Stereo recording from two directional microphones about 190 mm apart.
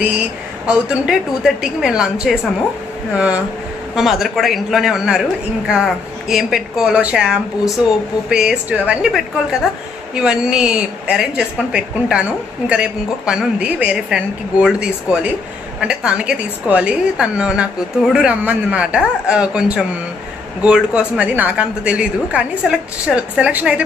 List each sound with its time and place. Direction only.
0.7 s a woman's voice: 5° right (ahead or behind)
3.9 s a woman's voice: centre (ahead or behind)